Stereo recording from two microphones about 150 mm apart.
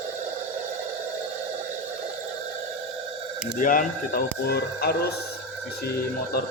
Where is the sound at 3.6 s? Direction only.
65° left (ahead or behind); by 5.1 s 90° left.